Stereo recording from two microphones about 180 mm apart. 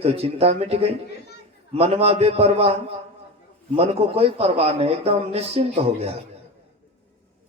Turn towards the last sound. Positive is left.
turn(degrees=-35)  # may be behind; listen again after turning